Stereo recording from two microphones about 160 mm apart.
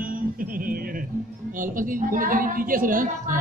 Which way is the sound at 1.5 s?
55° right (ahead or behind).